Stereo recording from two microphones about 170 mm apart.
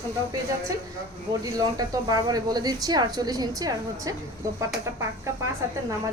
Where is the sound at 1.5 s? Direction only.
20° right (ahead or behind).